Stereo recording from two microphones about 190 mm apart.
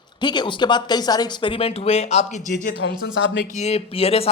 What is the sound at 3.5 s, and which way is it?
Speech, 35° left (ahead or behind).